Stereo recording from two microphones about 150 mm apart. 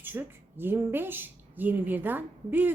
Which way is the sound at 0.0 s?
15° right (ahead or behind).